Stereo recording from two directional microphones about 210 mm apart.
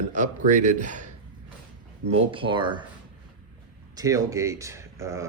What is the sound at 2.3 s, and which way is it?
Speech, 25° right (ahead or behind).